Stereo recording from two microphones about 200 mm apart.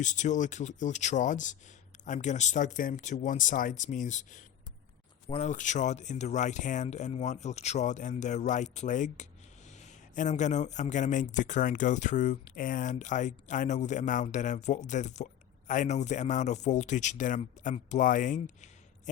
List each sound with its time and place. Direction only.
0.0 s a man's voice: 40° left (ahead or behind)